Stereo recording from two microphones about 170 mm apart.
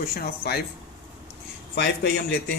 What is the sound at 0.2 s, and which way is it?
Speech, 65° left (ahead or behind).